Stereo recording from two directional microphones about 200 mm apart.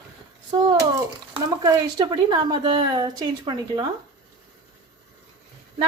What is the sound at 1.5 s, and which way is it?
Speech, 20° right (ahead or behind).